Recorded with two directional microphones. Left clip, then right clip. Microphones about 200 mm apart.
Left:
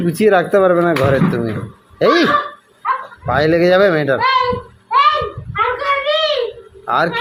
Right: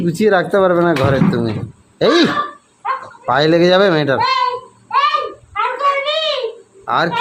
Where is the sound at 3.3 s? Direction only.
15° right (ahead or behind).